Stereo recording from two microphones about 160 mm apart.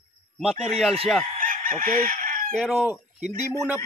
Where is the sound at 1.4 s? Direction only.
60° right (ahead or behind).